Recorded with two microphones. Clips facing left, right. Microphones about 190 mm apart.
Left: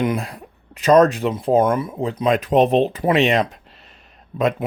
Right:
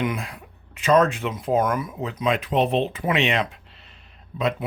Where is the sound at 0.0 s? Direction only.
35° left (ahead or behind).